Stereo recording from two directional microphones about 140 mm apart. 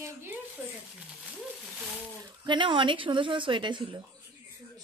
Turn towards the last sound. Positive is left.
turn(degrees=-35)  # may be behind; listen again after turning